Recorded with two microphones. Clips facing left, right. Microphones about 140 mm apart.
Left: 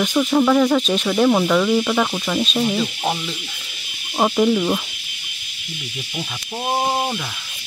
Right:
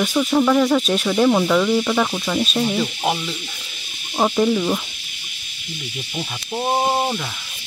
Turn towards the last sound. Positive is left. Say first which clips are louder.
# right 1 dB
turn(degrees=-5)  # may be behind; listen again after turning